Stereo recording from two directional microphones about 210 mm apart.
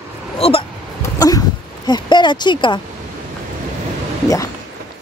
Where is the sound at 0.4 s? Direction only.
25° left (ahead or behind).